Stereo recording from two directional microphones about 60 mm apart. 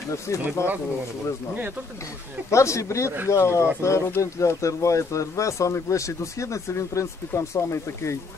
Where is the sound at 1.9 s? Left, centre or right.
Left.